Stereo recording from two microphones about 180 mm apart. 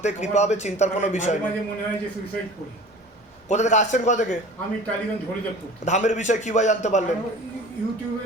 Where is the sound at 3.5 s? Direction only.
40° left (ahead or behind).